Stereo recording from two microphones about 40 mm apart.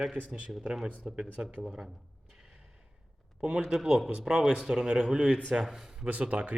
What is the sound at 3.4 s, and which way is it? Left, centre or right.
A man's voice, right.